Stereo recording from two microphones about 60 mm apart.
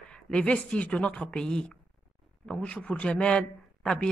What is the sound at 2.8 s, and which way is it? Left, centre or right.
Speech, left.